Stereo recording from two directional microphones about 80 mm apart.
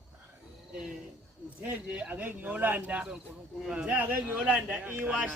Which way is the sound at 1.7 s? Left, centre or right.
Centre.